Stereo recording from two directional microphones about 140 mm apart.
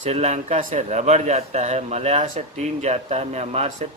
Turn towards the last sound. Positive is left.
turn(degrees=-45)  # may be behind; listen again after turning